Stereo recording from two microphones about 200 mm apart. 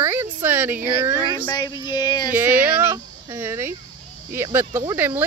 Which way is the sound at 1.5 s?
20° left (ahead or behind).